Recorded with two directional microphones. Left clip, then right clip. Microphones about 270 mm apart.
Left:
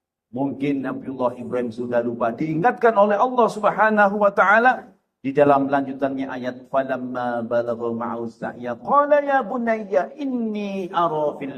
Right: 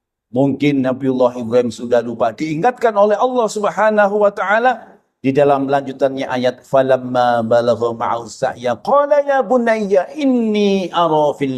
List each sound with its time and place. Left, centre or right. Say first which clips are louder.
0.6 s a man's voice: right 9 dB; right